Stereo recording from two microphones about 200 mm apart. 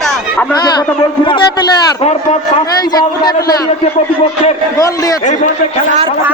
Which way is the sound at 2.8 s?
20° left (ahead or behind).